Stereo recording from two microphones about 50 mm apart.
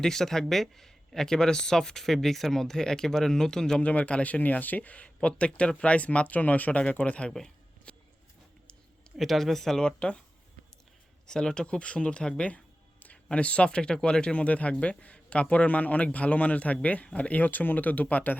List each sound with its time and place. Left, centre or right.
0.0 s speech: centre
3.8 s speech: left
7.9 s a sound: left
9.1 s speech: centre
9.8 s speech: left
11.3 s speech: centre; by 18.3 s left